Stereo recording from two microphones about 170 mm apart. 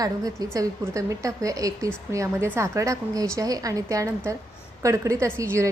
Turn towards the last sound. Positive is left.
turn(degrees=-15)  # may be behind; listen again after turning